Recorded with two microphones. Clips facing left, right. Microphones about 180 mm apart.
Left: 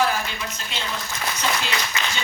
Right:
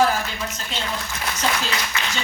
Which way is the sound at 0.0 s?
45° right (ahead or behind).